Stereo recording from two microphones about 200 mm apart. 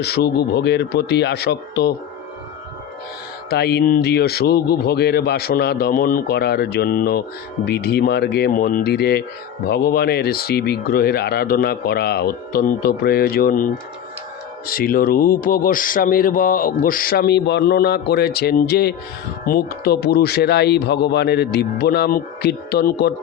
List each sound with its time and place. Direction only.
0.0 s speech: 55° left (ahead or behind)
3.5 s a man's voice: 55° left (ahead or behind)
14.7 s a man's voice: 45° left (ahead or behind)